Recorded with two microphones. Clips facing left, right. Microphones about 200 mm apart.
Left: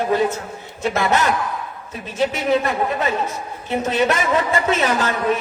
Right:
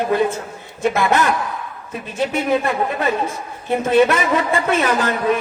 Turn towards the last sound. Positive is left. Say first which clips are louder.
# right 2 dB
turn(degrees=-55)  # may be behind; listen again after turning